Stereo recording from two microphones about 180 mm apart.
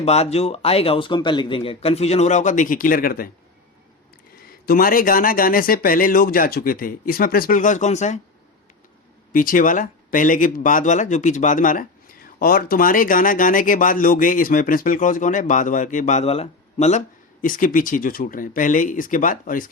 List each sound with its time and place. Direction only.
0.0 s speech: 35° left (ahead or behind); by 3.2 s 55° left (ahead or behind)
4.6 s speech: 55° left (ahead or behind)
9.3 s speech: 50° left (ahead or behind)
17.4 s speech: 50° left (ahead or behind)